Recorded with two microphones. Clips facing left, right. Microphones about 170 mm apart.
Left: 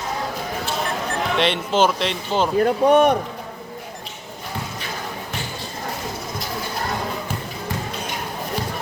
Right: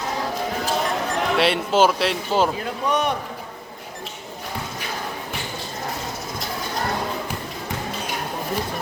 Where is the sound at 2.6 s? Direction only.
50° left (ahead or behind).